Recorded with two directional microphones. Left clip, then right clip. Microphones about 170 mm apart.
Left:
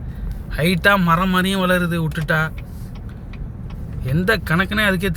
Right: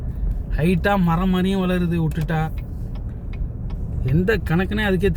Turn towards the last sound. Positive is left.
turn(degrees=-20)  # may be behind; listen again after turning